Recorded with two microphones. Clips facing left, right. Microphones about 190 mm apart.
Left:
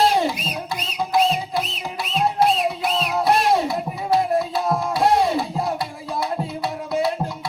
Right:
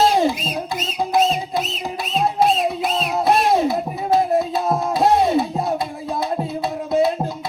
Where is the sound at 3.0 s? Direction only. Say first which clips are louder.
Right 1 dB; 20° right (ahead or behind).